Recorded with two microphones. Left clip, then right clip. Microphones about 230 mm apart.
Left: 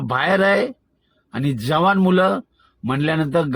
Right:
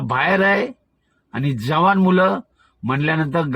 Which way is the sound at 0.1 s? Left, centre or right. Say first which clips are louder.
Even; right.